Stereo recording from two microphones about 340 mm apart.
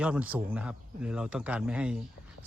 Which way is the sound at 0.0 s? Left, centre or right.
Centre.